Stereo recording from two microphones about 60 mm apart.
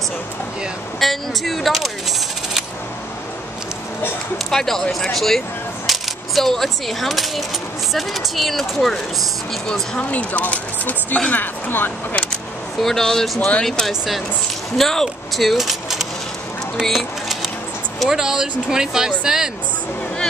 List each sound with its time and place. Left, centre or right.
0.9 s speech: centre
4.5 s speech: centre
5.9 s coin: centre
7.9 s speech: centre
9.9 s speech: left
12.8 s speech: centre
16.8 s a sound: centre
17.9 s speech: centre